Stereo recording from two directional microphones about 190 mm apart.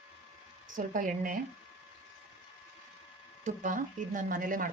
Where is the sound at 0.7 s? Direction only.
45° right (ahead or behind).